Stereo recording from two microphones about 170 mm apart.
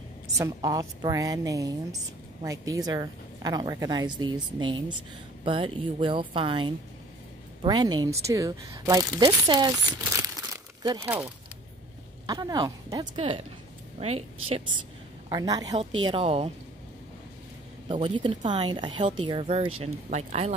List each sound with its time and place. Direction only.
0.4 s a woman's voice: 20° right (ahead or behind)
12.3 s a woman's voice: 25° right (ahead or behind)
15.2 s a woman's voice: 25° right (ahead or behind)
17.8 s a woman's voice: 30° right (ahead or behind)